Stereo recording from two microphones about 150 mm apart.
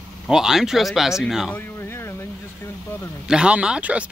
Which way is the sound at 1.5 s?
15° left (ahead or behind).